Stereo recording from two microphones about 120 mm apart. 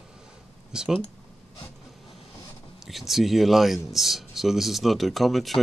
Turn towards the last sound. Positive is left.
turn(degrees=0)  # may be behind; listen again after turning